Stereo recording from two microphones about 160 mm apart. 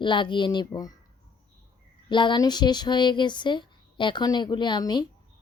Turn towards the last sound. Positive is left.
turn(degrees=25)  # may be behind; listen again after turning